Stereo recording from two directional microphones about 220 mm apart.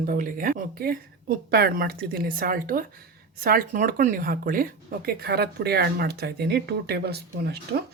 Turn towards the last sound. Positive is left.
turn(degrees=-45)  # may be behind; listen again after turning